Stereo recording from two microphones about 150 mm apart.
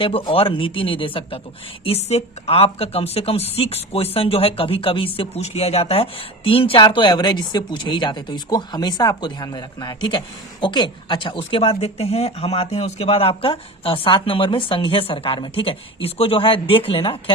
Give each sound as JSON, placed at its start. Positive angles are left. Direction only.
{"t": 0.0, "sound": "a woman's voice", "side_deg": 35}